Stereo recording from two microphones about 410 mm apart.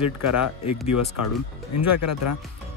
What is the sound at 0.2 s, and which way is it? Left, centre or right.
Speech, left.